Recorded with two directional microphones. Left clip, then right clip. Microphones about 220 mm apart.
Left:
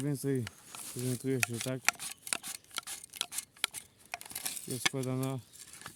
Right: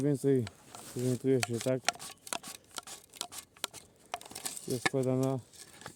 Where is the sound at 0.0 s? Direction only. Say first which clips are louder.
Right 6 dB; 30° left (ahead or behind).